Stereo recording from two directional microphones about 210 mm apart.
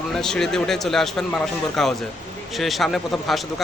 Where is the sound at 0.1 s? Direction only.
Centre (ahead or behind).